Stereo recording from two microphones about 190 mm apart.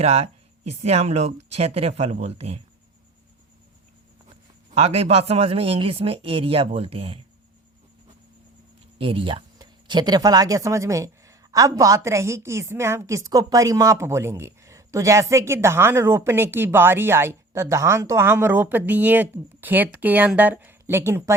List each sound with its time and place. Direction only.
0.0 s speech: 35° right (ahead or behind)
4.7 s speech: 30° right (ahead or behind)
9.0 s speech: 30° right (ahead or behind)